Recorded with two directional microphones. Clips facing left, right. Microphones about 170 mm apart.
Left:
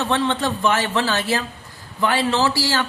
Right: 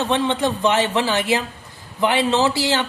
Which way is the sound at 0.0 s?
15° right (ahead or behind).